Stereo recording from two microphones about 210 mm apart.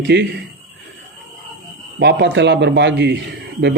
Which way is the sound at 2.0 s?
50° right (ahead or behind).